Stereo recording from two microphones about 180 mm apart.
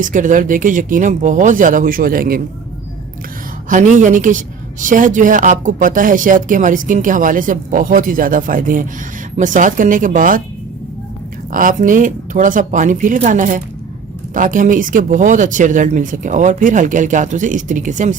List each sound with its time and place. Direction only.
0.0 s a woman's voice: 45° right (ahead or behind)
3.7 s a woman's voice: 45° right (ahead or behind)
11.5 s a woman's voice: 45° right (ahead or behind)